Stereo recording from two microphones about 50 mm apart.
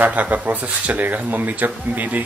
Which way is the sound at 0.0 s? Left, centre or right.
Right.